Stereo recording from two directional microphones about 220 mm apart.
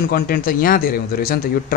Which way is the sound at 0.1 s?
40° left (ahead or behind).